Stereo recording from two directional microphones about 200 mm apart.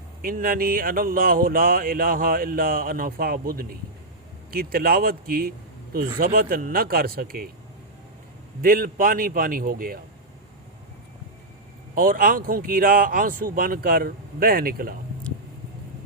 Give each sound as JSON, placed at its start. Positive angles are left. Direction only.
{"t": 0.2, "sound": "speech", "side_deg": -45}
{"t": 8.6, "sound": "speech", "side_deg": -45}
{"t": 11.9, "sound": "speech", "side_deg": -45}